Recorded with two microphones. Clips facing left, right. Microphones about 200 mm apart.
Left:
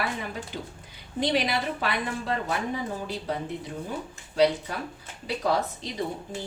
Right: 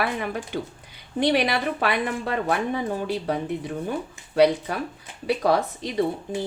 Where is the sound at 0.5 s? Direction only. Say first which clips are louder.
Right 7 dB; 65° right (ahead or behind).